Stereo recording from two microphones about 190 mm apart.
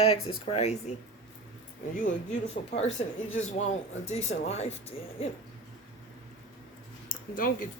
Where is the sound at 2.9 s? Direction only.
40° left (ahead or behind).